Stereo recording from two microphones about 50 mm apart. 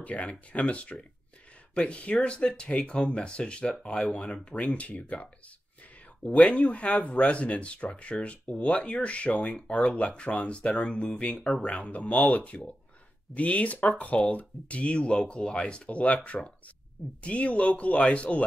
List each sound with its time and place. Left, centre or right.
0.0 s speech: left
17.2 s speech: left